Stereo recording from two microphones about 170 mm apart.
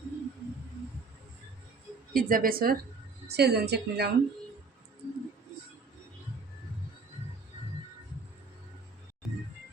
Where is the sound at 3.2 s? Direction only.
70° right (ahead or behind).